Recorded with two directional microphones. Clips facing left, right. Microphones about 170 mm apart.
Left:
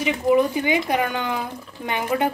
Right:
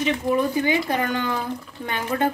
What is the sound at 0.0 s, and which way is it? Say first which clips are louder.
Speech: left 3 dB; 15° left (ahead or behind).